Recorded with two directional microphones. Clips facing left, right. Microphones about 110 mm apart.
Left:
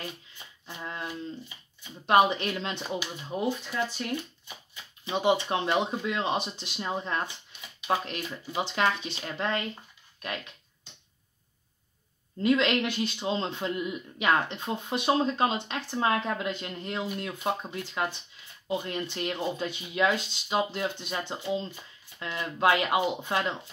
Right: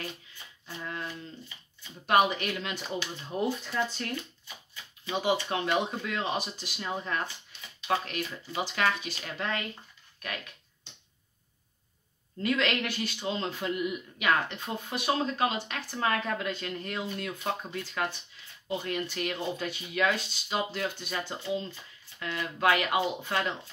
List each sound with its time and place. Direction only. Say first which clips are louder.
0.7 s a sound: left 1 dB; 20° left (ahead or behind)
1.8 s speech: left 2 dB; 20° left (ahead or behind)
3.2 s speech: even; 15° left (ahead or behind)
5.0 s speech: left 3 dB; 25° left (ahead or behind)
12.4 s speech: left 4 dB; 20° left (ahead or behind)